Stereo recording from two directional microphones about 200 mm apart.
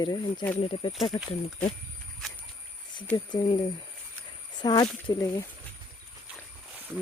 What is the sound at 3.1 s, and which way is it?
Speech, 20° left (ahead or behind).